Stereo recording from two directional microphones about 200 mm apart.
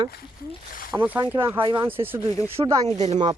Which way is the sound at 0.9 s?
10° right (ahead or behind).